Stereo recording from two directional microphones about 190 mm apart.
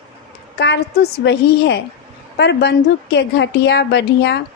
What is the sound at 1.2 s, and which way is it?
A woman's voice, 65° left (ahead or behind).